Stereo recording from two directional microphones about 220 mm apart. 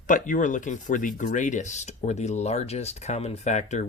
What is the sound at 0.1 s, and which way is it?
Speech, 35° left (ahead or behind).